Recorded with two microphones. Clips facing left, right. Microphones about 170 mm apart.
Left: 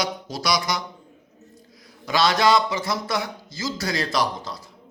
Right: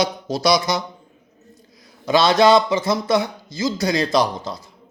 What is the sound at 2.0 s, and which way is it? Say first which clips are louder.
Speech: right 5 dB; 25° right (ahead or behind).